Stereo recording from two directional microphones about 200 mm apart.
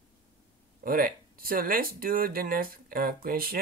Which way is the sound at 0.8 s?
45° right (ahead or behind).